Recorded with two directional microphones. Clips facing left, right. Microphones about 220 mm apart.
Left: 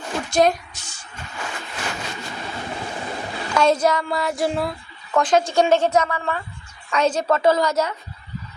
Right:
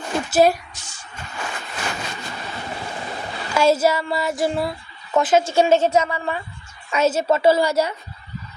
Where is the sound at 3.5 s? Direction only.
5° right (ahead or behind).